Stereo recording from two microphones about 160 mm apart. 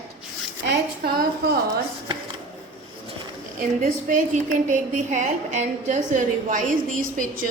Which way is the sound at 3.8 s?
50° right (ahead or behind).